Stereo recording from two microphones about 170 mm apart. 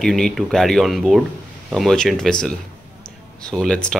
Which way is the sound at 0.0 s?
5° left (ahead or behind).